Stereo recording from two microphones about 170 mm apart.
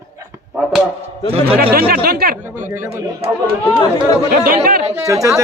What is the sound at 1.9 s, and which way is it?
Speech, 60° right (ahead or behind).